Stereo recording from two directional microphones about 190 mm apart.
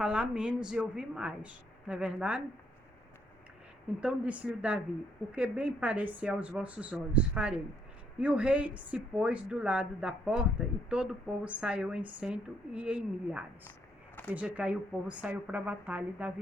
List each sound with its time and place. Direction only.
0.0 s a woman's voice: 5° right (ahead or behind)
4.0 s a woman's voice: 5° right (ahead or behind)